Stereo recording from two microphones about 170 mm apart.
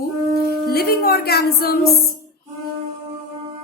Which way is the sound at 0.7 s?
65° left (ahead or behind).